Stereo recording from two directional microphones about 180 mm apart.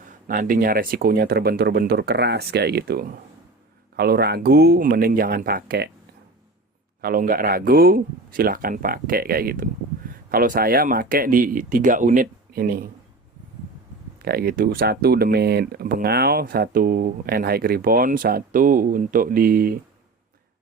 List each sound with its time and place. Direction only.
0.3 s speech: 50° right (ahead or behind)
7.0 s speech: 50° right (ahead or behind)
14.2 s speech: 60° right (ahead or behind)